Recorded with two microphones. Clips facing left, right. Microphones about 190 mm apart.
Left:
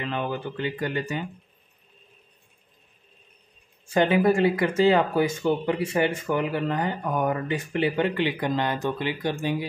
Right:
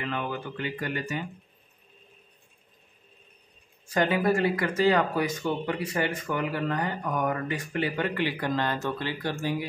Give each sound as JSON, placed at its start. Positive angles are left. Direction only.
{"t": 0.0, "sound": "speech", "side_deg": 30}
{"t": 3.9, "sound": "speech", "side_deg": 25}